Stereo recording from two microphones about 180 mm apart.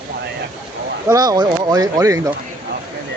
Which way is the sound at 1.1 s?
20° right (ahead or behind).